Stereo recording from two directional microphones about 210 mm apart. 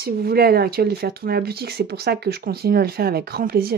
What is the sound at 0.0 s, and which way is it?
Speech, 50° right (ahead or behind).